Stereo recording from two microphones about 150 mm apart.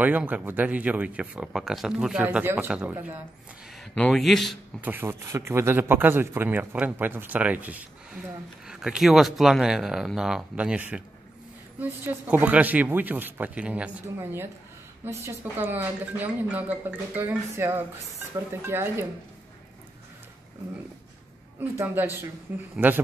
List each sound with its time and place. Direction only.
0.0 s speech: 10° right (ahead or behind)
3.9 s a man's voice: 5° left (ahead or behind)
4.8 s speech: 15° right (ahead or behind)
21.5 s speech: 15° right (ahead or behind)